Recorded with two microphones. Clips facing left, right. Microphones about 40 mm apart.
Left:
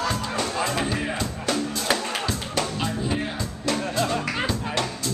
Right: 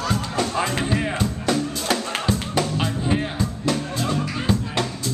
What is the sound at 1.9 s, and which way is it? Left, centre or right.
Music, centre.